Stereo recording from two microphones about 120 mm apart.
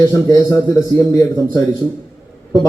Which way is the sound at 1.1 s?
30° left (ahead or behind).